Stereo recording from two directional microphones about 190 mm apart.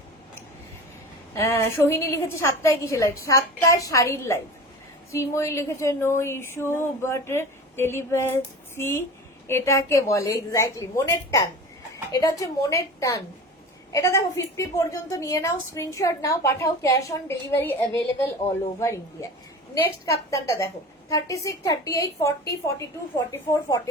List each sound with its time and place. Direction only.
1.3 s a woman's voice: 15° left (ahead or behind)
19.8 s a woman's voice: 15° left (ahead or behind)